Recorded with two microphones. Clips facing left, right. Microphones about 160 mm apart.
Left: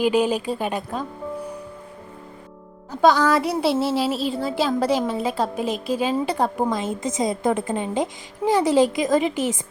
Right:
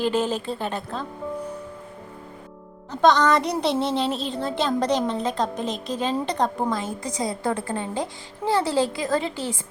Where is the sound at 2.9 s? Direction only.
5° left (ahead or behind).